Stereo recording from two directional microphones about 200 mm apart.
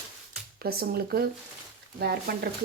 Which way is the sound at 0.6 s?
50° right (ahead or behind).